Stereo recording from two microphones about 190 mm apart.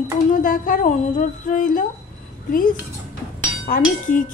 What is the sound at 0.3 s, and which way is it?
Speech, 45° left (ahead or behind).